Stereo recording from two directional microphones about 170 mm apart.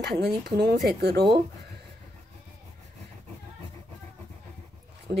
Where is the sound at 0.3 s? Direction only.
70° right (ahead or behind).